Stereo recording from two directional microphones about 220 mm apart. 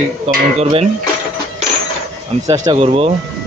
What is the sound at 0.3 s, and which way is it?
Speech, 30° right (ahead or behind).